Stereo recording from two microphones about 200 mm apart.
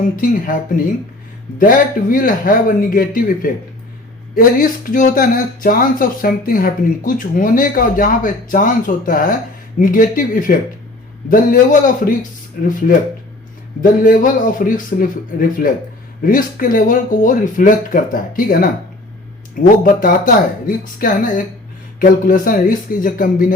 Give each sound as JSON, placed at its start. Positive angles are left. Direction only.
{"t": 0.2, "sound": "speech", "side_deg": 45}
{"t": 1.5, "sound": "speech", "side_deg": 45}
{"t": 13.8, "sound": "speech", "side_deg": 45}